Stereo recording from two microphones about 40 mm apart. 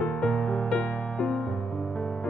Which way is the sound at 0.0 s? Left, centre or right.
Centre.